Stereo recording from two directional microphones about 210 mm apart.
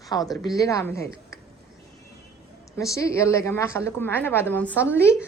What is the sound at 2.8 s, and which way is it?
A woman's voice, 15° left (ahead or behind).